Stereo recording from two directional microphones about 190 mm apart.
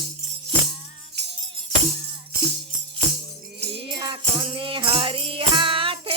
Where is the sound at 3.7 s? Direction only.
25° right (ahead or behind).